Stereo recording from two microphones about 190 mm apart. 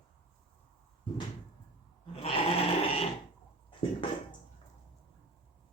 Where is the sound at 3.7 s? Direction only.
25° left (ahead or behind).